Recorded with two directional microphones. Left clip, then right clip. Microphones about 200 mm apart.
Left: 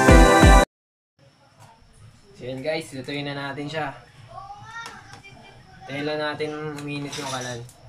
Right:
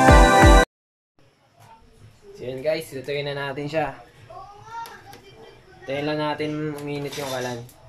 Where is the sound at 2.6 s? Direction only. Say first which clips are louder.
Right 3 dB; 30° right (ahead or behind).